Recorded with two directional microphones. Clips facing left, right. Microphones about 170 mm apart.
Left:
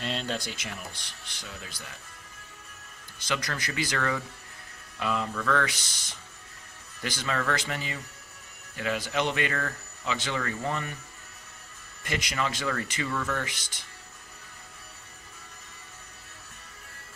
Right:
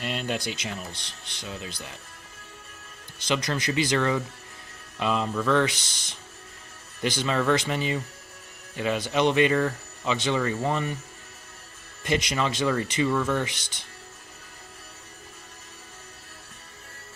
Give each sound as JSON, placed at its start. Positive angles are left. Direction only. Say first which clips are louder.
{"t": 0.0, "sound": "speech", "louder": "right 2 dB", "side_deg": -10}
{"t": 0.4, "sound": "speech", "louder": "right 5 dB", "side_deg": -20}
{"t": 3.2, "sound": "speech", "louder": "right 6 dB", "side_deg": -20}
{"t": 12.0, "sound": "speech", "louder": "right 5 dB", "side_deg": -20}